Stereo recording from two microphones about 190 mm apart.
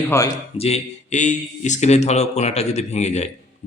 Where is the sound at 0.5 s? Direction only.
35° left (ahead or behind).